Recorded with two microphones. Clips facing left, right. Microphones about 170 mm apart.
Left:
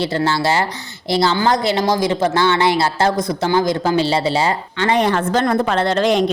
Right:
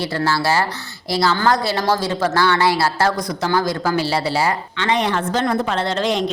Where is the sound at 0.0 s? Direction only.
25° left (ahead or behind).